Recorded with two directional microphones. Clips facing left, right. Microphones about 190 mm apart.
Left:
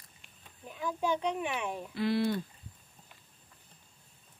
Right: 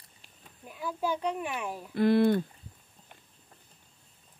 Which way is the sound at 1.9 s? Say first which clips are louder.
Right 7 dB; 50° right (ahead or behind).